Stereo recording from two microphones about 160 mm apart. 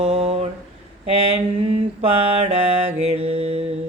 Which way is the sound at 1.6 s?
35° right (ahead or behind).